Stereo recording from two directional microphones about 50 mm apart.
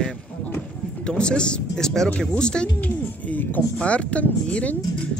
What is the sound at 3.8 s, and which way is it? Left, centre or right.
Speech, left.